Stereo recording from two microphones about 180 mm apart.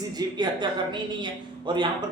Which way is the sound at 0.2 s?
25° right (ahead or behind).